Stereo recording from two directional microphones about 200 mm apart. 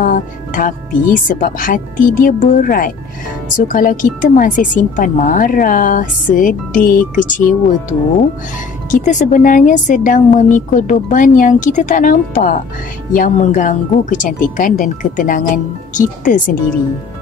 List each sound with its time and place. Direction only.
0.0 s speech: 40° left (ahead or behind)
8.9 s speech: 40° left (ahead or behind)